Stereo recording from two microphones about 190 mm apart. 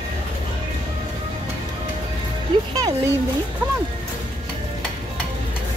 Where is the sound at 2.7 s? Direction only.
20° right (ahead or behind).